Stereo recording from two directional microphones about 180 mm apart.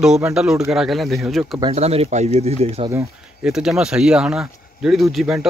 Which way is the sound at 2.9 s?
5° right (ahead or behind).